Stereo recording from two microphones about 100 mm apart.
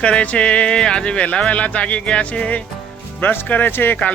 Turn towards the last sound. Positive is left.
turn(degrees=20)  # may be behind; listen again after turning